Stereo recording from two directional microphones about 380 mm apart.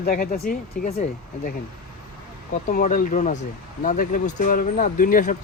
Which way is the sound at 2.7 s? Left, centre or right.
Left.